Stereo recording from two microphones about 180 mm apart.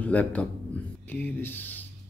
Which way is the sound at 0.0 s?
10° left (ahead or behind).